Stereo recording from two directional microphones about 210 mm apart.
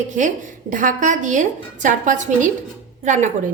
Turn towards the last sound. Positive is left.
turn(degrees=-35)  # may be behind; listen again after turning